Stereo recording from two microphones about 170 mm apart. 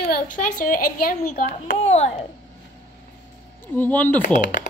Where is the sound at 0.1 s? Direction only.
50° left (ahead or behind).